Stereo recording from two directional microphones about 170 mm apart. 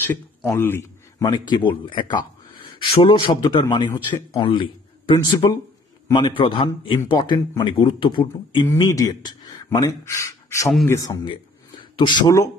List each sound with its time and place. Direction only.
0.0 s speech: 15° left (ahead or behind)
1.9 s a man's voice: 30° left (ahead or behind)
8.6 s speech: 20° left (ahead or behind)